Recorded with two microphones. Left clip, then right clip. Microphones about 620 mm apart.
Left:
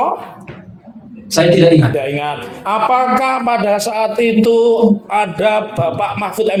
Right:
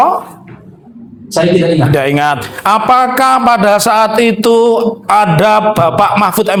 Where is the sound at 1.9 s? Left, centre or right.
Right.